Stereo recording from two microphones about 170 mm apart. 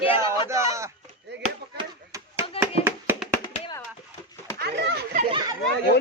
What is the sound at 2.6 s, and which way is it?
Hands, 15° right (ahead or behind).